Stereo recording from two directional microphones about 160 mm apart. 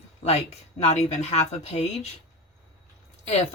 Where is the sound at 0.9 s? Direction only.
45° left (ahead or behind).